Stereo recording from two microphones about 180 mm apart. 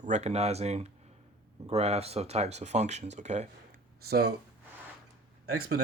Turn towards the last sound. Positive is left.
turn(degrees=-60)  # may be behind; listen again after turning